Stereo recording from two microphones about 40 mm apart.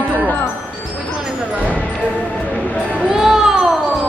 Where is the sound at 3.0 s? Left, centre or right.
Centre.